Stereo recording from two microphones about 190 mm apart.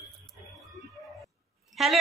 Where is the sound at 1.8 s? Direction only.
Centre (ahead or behind).